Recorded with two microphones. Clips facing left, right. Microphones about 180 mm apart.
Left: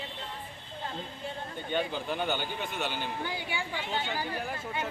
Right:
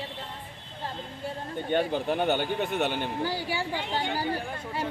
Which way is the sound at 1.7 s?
55° right (ahead or behind).